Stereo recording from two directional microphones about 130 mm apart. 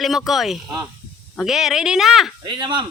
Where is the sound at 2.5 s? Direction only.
40° right (ahead or behind).